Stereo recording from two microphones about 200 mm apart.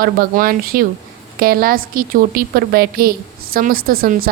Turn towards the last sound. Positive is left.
turn(degrees=-45)  # may be behind; listen again after turning